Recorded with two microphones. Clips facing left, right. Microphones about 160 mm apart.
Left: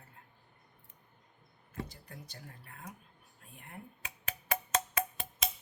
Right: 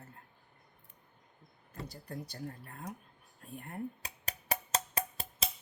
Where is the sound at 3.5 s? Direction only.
40° right (ahead or behind).